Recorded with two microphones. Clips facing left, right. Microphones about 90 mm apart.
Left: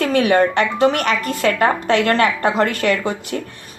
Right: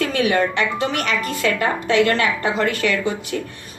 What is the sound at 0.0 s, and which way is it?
Speech, 50° left (ahead or behind).